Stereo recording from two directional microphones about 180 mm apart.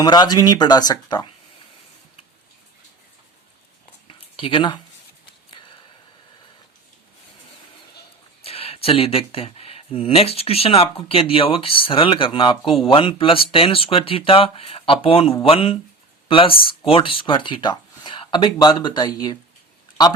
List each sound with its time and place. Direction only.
0.0 s speech: 25° left (ahead or behind)
4.4 s speech: 30° left (ahead or behind)
8.4 s speech: 35° left (ahead or behind)